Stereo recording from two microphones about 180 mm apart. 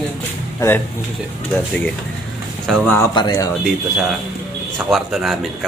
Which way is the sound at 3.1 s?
20° left (ahead or behind).